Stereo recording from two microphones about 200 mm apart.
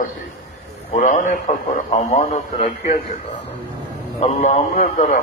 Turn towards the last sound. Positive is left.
turn(degrees=40)  # may be behind; listen again after turning